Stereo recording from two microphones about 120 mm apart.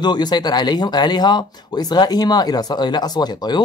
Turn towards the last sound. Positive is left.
turn(degrees=35)  # may be behind; listen again after turning